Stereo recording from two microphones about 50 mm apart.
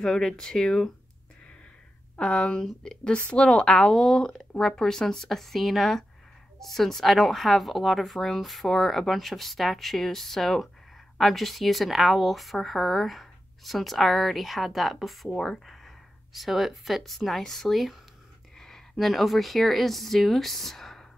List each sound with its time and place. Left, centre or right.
0.0 s speech: centre
2.1 s speech: left